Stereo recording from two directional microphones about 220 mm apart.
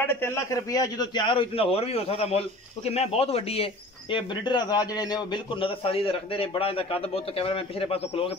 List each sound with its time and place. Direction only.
0.0 s a man's voice: 10° left (ahead or behind); by 8.3 s 25° left (ahead or behind)